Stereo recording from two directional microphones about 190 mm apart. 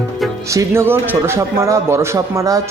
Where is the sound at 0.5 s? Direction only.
15° right (ahead or behind).